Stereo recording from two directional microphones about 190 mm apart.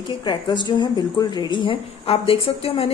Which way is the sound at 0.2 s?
25° left (ahead or behind).